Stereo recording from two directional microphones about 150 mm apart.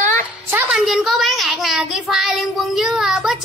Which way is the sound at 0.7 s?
5° right (ahead or behind).